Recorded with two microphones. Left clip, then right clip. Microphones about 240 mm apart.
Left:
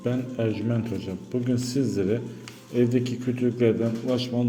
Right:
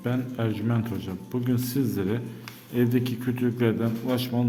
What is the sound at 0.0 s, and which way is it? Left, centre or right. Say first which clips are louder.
A man's voice: left 2 dB; centre.